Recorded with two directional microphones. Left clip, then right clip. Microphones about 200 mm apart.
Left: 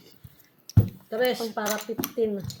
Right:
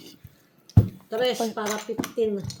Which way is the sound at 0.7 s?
45° left (ahead or behind).